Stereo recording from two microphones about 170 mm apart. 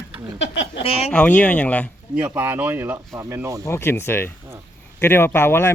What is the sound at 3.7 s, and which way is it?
Speech, 15° left (ahead or behind).